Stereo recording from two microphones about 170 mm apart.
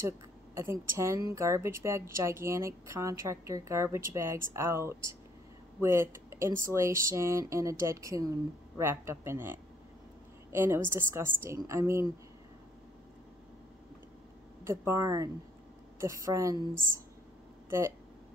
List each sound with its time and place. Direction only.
0.6 s a woman's voice: 15° right (ahead or behind)
14.6 s a woman's voice: 15° right (ahead or behind)